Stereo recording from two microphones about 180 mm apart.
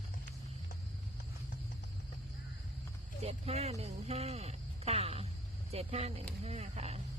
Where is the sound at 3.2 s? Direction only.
35° right (ahead or behind).